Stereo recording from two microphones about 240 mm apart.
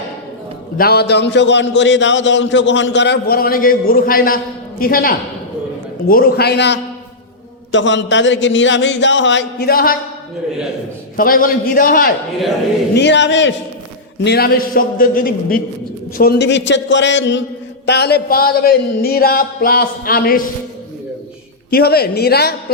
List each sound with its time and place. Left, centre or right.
0.8 s a man's voice: left
11.2 s speech: left
12.9 s a man's voice: left
21.7 s speech: left